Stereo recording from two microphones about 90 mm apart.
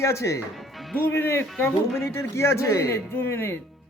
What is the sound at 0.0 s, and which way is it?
Speech, 35° left (ahead or behind).